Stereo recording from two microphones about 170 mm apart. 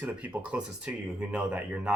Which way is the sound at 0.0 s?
10° right (ahead or behind).